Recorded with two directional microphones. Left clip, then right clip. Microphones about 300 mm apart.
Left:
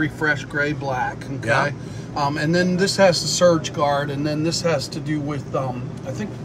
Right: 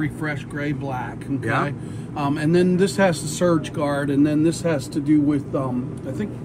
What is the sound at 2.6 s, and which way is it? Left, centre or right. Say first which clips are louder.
Speech: left 1 dB; left.